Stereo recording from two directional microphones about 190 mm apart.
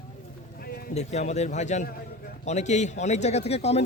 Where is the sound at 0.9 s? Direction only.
35° left (ahead or behind).